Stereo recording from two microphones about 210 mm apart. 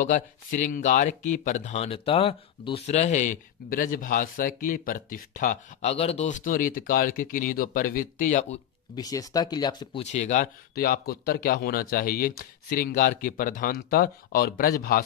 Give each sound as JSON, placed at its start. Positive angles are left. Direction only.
{"t": 0.0, "sound": "speech", "side_deg": 35}
{"t": 8.9, "sound": "speech", "side_deg": 15}
{"t": 10.0, "sound": "speech", "side_deg": 35}